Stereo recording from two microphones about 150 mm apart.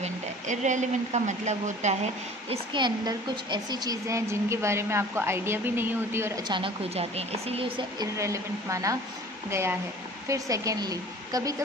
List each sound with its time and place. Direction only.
0.0 s speech: 55° right (ahead or behind)
2.5 s a woman's voice: 30° right (ahead or behind); by 6.3 s 15° right (ahead or behind)
6.5 s speech: 40° right (ahead or behind)
8.2 s a woman's voice: 20° right (ahead or behind)